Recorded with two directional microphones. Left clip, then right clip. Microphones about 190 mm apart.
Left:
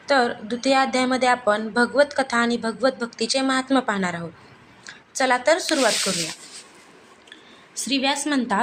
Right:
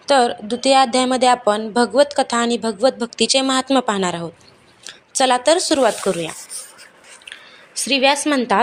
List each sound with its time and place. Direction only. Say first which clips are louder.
0.0 s speech: right 5 dB; 25° right (ahead or behind)
7.8 s speech: right 7 dB; 30° right (ahead or behind)